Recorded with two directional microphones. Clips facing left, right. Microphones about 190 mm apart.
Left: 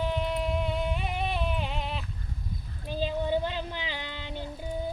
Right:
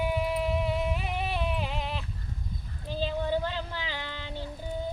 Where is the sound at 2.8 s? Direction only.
15° left (ahead or behind).